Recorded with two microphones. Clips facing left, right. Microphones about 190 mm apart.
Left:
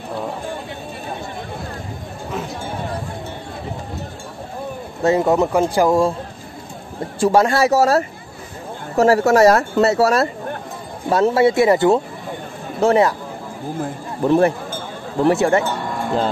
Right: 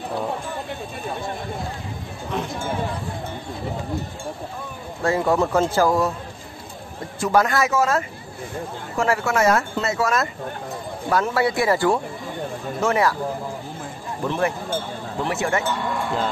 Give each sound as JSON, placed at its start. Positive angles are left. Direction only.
{"t": 5.0, "sound": "speech", "side_deg": 20}
{"t": 7.2, "sound": "speech", "side_deg": 30}
{"t": 14.2, "sound": "speech", "side_deg": 35}